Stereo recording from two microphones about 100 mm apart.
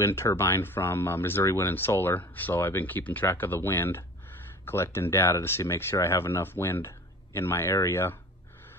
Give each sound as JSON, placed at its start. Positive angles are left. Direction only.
{"t": 0.0, "sound": "speech", "side_deg": 25}